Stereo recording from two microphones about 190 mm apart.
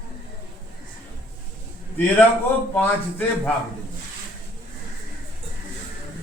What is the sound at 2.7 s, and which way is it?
Speech, 10° left (ahead or behind).